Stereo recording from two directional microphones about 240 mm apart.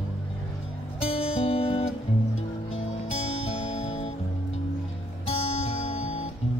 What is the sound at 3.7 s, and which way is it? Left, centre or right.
Music, left.